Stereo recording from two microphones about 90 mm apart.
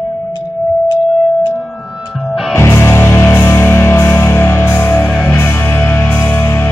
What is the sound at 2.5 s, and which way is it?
Music, 30° left (ahead or behind).